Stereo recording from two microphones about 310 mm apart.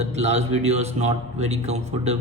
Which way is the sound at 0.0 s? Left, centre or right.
Right.